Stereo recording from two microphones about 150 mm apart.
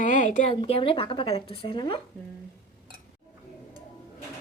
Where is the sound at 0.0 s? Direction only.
60° left (ahead or behind).